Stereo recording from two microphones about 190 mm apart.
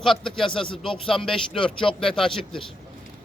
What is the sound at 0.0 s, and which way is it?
Speech, centre (ahead or behind).